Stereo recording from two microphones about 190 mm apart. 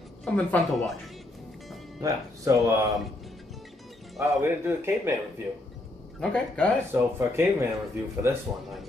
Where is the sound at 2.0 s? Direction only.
15° right (ahead or behind).